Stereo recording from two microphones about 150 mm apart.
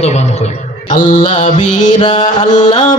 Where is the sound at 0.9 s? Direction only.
55° left (ahead or behind).